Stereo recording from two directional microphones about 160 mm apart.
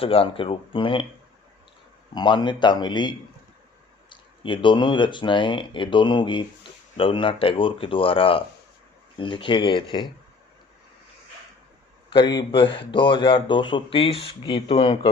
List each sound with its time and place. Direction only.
0.0 s speech: 35° left (ahead or behind)
2.1 s speech: 30° left (ahead or behind)
12.1 s speech: 30° left (ahead or behind)